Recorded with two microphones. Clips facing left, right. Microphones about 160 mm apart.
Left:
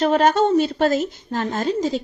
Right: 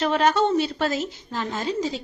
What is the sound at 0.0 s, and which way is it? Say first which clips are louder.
A woman's voice: left 4 dB; 45° left (ahead or behind).